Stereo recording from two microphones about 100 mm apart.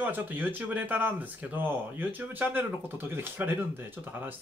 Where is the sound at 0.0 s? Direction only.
20° right (ahead or behind).